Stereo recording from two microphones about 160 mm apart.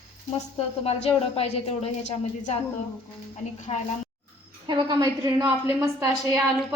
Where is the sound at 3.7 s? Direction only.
40° left (ahead or behind).